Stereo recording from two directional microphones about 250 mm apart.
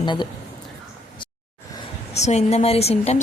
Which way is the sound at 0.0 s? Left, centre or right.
Centre.